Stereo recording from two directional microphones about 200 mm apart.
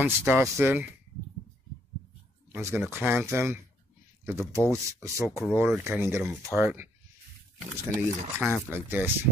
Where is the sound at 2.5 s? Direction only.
10° right (ahead or behind).